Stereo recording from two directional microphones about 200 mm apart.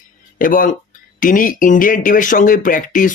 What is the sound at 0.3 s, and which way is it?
Speech, 45° left (ahead or behind).